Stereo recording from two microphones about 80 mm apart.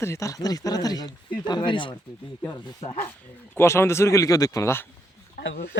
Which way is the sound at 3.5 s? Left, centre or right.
Left.